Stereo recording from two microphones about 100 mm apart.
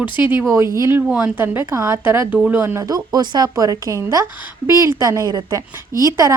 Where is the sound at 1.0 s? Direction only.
10° right (ahead or behind).